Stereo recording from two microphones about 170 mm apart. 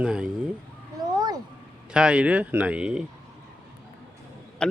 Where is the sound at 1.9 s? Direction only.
5° right (ahead or behind).